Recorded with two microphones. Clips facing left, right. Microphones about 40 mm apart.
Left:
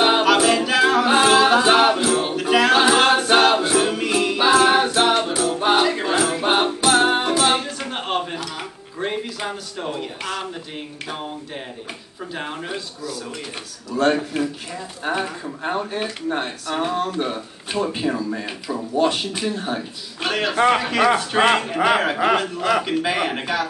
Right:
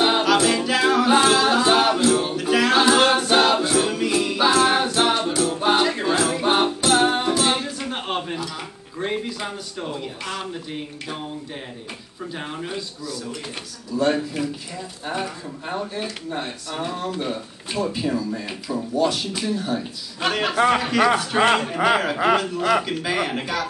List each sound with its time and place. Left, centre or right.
0.0 s music: left
2.8 s a capella: centre
5.2 s music: left
7.1 s music: left
7.9 s a sound: centre
12.4 s a sound: centre
13.8 s a man's voice: left
14.1 s speech: left
20.5 s a sound: centre
21.7 s a sound: centre
22.6 s a man's voice: centre
22.8 s speech: left